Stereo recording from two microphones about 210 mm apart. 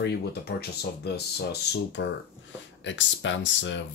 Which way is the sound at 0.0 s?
50° left (ahead or behind).